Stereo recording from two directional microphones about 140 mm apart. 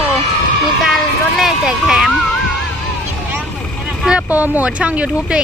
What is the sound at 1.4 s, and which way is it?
Vehicle, 5° right (ahead or behind).